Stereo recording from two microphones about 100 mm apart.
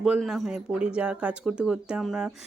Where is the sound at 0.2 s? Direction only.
Centre (ahead or behind).